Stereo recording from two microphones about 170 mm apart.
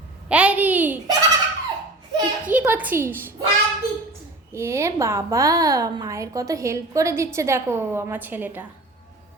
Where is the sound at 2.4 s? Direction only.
10° right (ahead or behind).